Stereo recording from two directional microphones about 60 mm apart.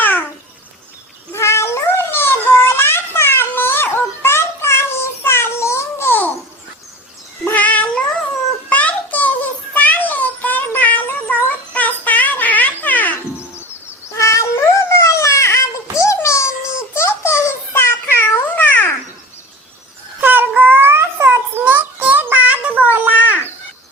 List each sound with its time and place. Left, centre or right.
0.0 s babbling: left
1.3 s cat: left
7.5 s cat: left
8.7 s a sound: left
9.7 s cat: left
14.1 s cat: left
16.9 s a sound: left
18.0 s cat: left
20.2 s babbling: right
20.6 s a sound: right
21.6 s child singing: right
22.0 s a sound: right